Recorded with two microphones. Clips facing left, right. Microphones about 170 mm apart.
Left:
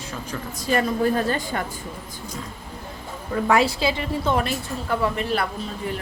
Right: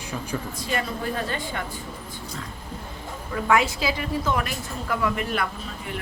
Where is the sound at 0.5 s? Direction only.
40° left (ahead or behind).